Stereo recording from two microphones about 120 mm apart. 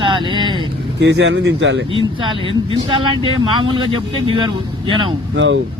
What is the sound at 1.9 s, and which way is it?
Speech, 50° right (ahead or behind).